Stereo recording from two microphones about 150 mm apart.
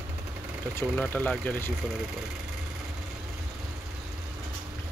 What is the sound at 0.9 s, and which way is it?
Speech, 10° left (ahead or behind).